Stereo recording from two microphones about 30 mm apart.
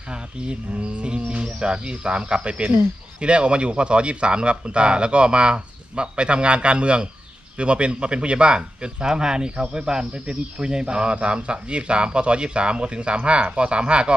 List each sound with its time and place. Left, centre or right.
0.1 s speech: right
1.2 s speech: right
1.5 s speech: right